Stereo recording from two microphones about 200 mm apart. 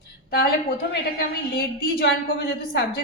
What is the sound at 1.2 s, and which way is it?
A woman's voice, 50° left (ahead or behind).